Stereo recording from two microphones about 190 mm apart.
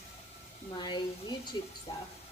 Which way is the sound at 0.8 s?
25° left (ahead or behind).